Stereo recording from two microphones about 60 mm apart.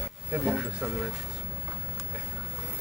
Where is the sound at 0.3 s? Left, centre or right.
Centre.